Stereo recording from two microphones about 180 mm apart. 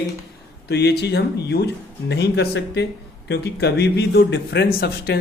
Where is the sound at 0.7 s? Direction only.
70° left (ahead or behind).